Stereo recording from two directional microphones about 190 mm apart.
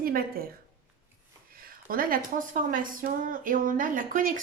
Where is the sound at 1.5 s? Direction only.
50° right (ahead or behind).